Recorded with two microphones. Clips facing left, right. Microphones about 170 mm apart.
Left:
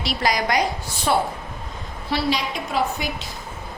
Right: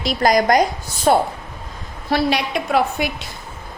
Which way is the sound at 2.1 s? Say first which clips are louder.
Right 5 dB; 65° right (ahead or behind).